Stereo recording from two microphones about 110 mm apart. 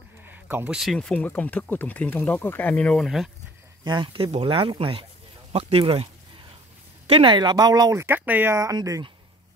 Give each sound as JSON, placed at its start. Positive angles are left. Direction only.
{"t": 0.2, "sound": "a sound", "side_deg": -20}
{"t": 0.7, "sound": "speech", "side_deg": 5}
{"t": 3.8, "sound": "speech", "side_deg": -45}
{"t": 7.1, "sound": "speech", "side_deg": -55}
{"t": 8.0, "sound": "speech", "side_deg": -20}